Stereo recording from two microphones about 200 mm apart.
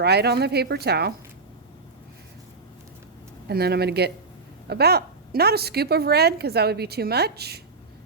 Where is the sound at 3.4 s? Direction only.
55° right (ahead or behind).